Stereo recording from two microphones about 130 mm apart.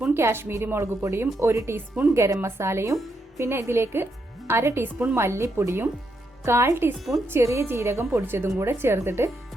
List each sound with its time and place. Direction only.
0.1 s a woman's voice: 20° right (ahead or behind)